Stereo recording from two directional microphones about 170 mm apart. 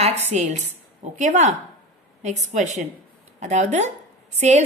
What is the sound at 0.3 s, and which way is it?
A woman's voice, 45° right (ahead or behind).